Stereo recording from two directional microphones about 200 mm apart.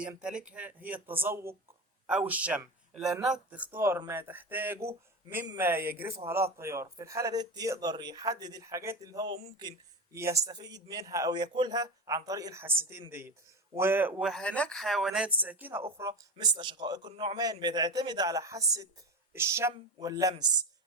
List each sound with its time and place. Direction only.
0.0 s speech: 5° right (ahead or behind)
14.2 s speech: centre (ahead or behind); by 20.3 s 15° right (ahead or behind)